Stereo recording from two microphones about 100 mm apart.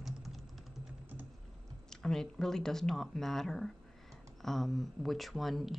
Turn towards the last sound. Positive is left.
turn(degrees=0)  # may be behind; listen again after turning